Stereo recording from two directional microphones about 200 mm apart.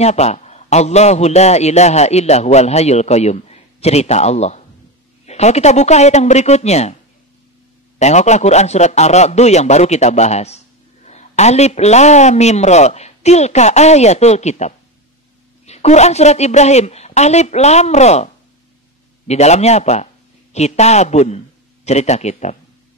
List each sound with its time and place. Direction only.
0.0 s a man's voice: 35° left (ahead or behind)
8.0 s a man's voice: 35° left (ahead or behind)